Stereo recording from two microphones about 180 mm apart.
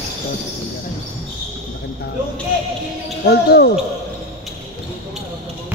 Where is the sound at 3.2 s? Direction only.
60° left (ahead or behind).